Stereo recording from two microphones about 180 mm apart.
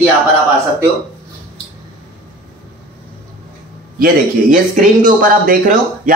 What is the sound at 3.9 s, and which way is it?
Speech, 50° right (ahead or behind).